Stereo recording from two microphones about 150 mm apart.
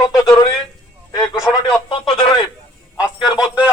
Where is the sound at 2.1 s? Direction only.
30° left (ahead or behind).